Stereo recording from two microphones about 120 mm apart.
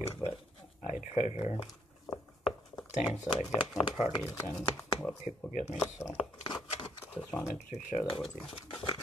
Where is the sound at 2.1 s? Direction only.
30° left (ahead or behind).